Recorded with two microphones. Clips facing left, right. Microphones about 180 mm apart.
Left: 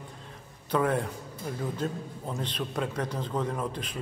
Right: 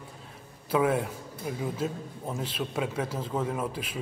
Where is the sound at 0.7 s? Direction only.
5° right (ahead or behind).